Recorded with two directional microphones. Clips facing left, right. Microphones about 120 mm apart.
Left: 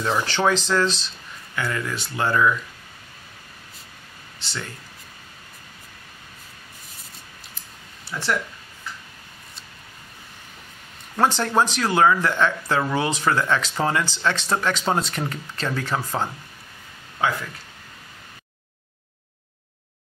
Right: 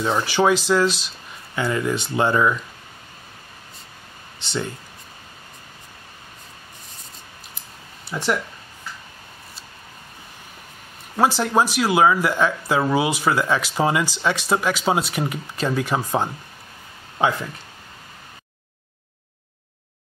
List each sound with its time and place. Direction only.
0.0 s speech: 10° right (ahead or behind)
4.4 s speech: 20° right (ahead or behind)
8.1 s speech: 15° right (ahead or behind)
11.1 s speech: 5° right (ahead or behind)